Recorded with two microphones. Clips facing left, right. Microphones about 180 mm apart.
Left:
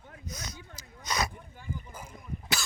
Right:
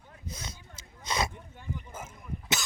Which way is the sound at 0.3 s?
25° right (ahead or behind).